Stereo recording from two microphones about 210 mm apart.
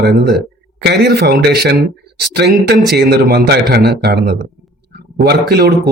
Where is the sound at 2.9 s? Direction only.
50° right (ahead or behind).